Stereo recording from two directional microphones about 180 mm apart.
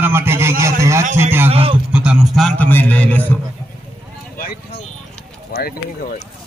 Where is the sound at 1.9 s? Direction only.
5° right (ahead or behind).